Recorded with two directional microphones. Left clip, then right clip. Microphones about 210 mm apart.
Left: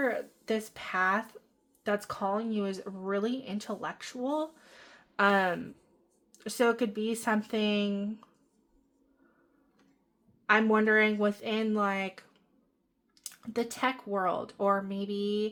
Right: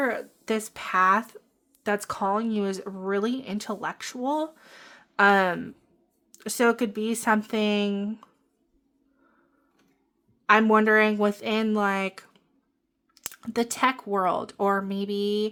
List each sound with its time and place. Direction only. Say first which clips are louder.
0.0 s speech: right 4 dB; 35° right (ahead or behind)
10.4 s speech: right 6 dB; 35° right (ahead or behind)